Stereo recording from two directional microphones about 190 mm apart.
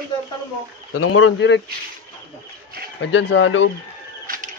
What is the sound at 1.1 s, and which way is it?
Speech, 80° left.